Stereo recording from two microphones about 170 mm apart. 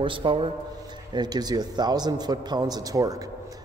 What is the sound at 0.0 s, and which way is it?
A man's voice, 30° right (ahead or behind).